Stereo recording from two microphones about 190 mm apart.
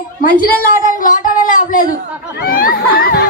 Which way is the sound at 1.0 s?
45° left (ahead or behind).